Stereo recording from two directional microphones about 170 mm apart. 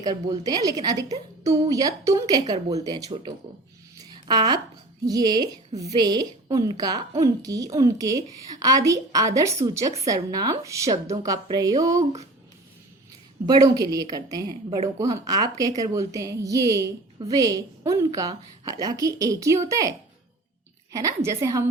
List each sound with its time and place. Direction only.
0.0 s a woman's voice: 25° right (ahead or behind)
3.9 s a sound: 25° right (ahead or behind)
5.0 s a woman's voice: 25° right (ahead or behind)
13.4 s a woman's voice: 25° right (ahead or behind)
20.9 s a woman's voice: 15° right (ahead or behind)